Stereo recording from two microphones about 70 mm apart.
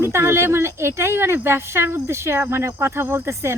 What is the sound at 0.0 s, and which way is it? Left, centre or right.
Speech, right.